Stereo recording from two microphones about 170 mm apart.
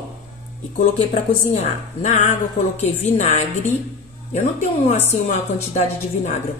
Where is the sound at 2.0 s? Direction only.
40° left (ahead or behind).